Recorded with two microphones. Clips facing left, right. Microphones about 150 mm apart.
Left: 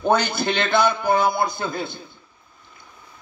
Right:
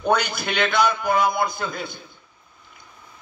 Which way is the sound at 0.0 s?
25° left (ahead or behind).